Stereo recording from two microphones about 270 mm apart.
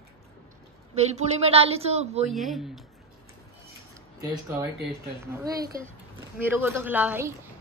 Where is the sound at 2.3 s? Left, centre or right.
Centre.